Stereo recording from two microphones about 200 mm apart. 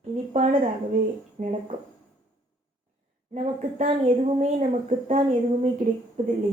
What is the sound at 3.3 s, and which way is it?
Speech, 35° right (ahead or behind).